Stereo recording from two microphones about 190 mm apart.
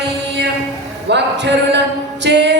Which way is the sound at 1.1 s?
65° right (ahead or behind).